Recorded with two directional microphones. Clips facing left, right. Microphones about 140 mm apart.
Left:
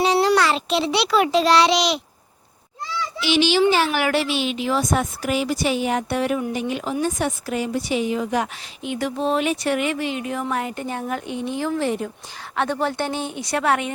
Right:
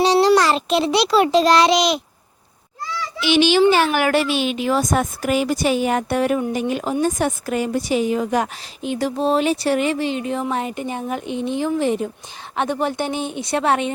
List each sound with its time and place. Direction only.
0.0 s a child's voice: 30° right (ahead or behind); by 2.0 s 45° right (ahead or behind)
3.2 s a child's voice: 55° right (ahead or behind); by 13.9 s 25° right (ahead or behind)